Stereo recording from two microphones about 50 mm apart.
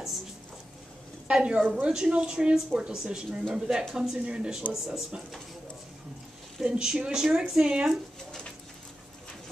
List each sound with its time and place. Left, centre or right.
1.3 s speech: centre
4.2 s speech: right
6.6 s speech: centre